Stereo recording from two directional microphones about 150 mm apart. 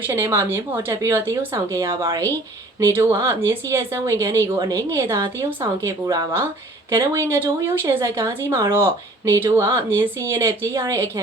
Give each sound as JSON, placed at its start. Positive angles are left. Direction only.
{"t": 0.1, "sound": "speech", "side_deg": -15}